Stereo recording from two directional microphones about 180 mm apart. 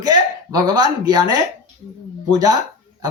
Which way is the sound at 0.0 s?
20° right (ahead or behind).